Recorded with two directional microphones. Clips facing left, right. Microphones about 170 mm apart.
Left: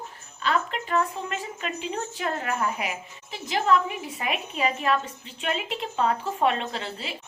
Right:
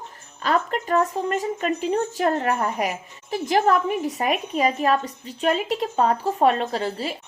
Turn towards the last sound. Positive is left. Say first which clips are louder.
# right 7 dB
turn(degrees=-40)  # may be behind; listen again after turning